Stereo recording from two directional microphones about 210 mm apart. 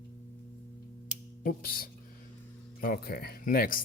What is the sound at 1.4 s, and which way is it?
Speech, 45° left (ahead or behind).